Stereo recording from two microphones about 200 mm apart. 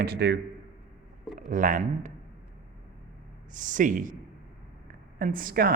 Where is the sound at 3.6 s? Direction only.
40° right (ahead or behind).